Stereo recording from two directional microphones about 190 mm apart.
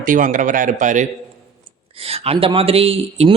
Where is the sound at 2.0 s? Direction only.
30° right (ahead or behind).